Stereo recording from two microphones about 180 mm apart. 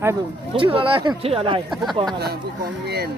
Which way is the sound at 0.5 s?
30° right (ahead or behind).